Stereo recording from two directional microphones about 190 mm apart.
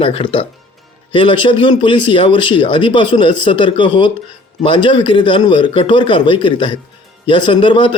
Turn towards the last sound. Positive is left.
turn(degrees=25)  # may be behind; listen again after turning